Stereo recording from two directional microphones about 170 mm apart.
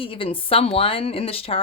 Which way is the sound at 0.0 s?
30° left (ahead or behind).